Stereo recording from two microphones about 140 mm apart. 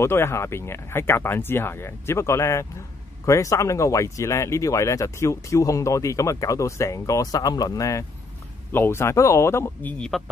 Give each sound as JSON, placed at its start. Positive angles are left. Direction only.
{"t": 0.0, "sound": "speech", "side_deg": 20}
{"t": 9.9, "sound": "speech", "side_deg": 5}